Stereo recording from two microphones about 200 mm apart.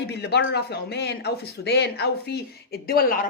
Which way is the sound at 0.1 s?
55° left (ahead or behind).